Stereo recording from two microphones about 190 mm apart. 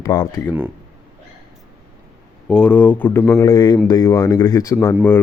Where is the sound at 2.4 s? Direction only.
5° left (ahead or behind).